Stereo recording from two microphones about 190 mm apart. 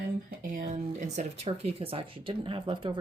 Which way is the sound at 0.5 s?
40° right (ahead or behind).